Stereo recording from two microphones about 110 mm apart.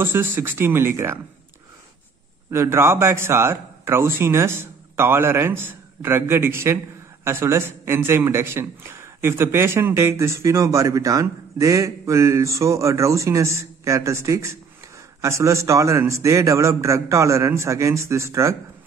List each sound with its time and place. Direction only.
0.0 s a man's voice: 20° right (ahead or behind)
2.5 s a man's voice: 25° right (ahead or behind)